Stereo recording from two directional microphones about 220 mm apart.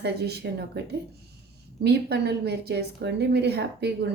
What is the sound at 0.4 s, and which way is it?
Speech, 50° right (ahead or behind).